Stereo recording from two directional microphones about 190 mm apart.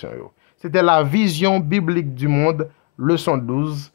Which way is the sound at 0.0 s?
35° right (ahead or behind).